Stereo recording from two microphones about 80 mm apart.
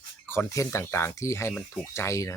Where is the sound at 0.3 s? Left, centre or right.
Left.